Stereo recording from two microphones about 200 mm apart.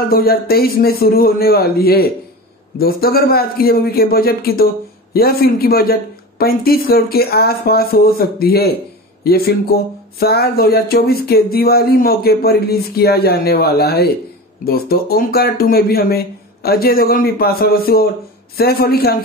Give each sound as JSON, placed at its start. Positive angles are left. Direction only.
{"t": 0.1, "sound": "speech", "side_deg": 50}